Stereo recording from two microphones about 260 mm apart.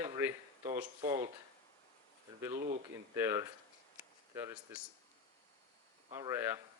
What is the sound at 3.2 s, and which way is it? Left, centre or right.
Speech, centre.